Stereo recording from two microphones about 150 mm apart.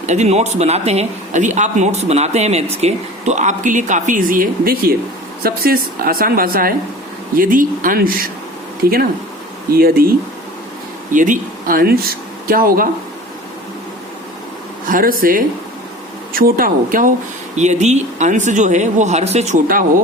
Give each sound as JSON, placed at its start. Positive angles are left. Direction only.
{"t": 0.0, "sound": "a woman's voice", "side_deg": -50}
{"t": 7.3, "sound": "a woman's voice", "side_deg": -65}
{"t": 8.8, "sound": "speech", "side_deg": -90}
{"t": 11.1, "sound": "a woman's voice", "side_deg": -60}
{"t": 14.8, "sound": "a woman's voice", "side_deg": -70}
{"t": 17.6, "sound": "speech", "side_deg": -50}